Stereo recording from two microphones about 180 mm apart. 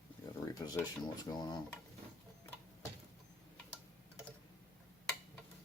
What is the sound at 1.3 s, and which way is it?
Speech, 20° left (ahead or behind).